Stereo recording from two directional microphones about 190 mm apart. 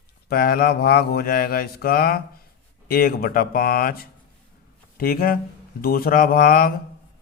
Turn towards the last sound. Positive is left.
turn(degrees=50)  # may be behind; listen again after turning